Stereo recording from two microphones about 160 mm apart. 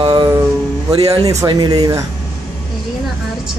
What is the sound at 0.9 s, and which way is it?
Speech, 20° right (ahead or behind).